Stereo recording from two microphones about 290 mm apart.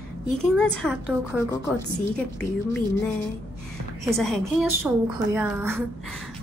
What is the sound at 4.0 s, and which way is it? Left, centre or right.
A woman's voice, centre.